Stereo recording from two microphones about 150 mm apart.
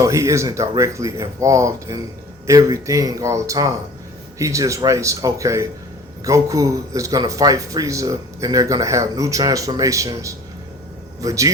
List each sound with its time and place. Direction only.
0.0 s speech: 20° right (ahead or behind)